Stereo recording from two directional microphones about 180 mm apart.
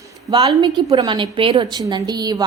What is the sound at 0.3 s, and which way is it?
A woman's voice, 20° right (ahead or behind).